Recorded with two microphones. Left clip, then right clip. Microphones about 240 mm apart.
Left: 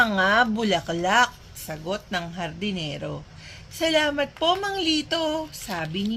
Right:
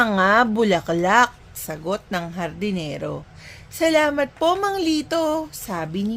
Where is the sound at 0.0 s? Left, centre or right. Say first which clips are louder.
Right 3 dB; right.